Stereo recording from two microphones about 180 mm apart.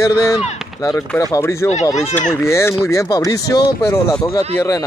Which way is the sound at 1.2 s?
15° left (ahead or behind).